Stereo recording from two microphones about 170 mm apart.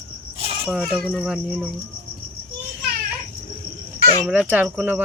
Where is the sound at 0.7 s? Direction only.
5° right (ahead or behind).